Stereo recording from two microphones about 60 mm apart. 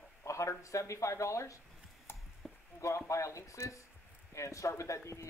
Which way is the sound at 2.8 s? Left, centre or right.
Left.